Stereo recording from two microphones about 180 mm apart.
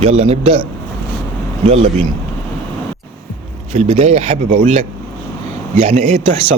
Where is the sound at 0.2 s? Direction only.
35° right (ahead or behind).